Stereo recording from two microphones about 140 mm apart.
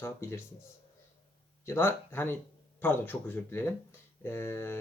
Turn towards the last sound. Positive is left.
turn(degrees=15)  # may be behind; listen again after turning